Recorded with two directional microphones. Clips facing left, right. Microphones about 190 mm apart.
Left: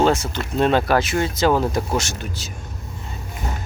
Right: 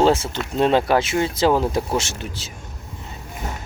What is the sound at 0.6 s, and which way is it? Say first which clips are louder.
Speech: even; 25° right (ahead or behind).